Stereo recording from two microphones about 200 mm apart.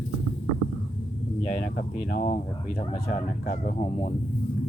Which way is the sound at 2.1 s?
40° left (ahead or behind).